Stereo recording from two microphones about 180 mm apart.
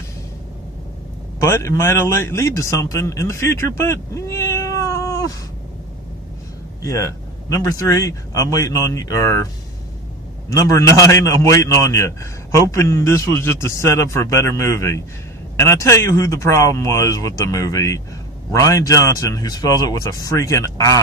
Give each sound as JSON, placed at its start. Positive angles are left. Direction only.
{"t": 1.4, "sound": "a man's voice", "side_deg": 15}
{"t": 6.8, "sound": "speech", "side_deg": 15}
{"t": 10.5, "sound": "speech", "side_deg": 15}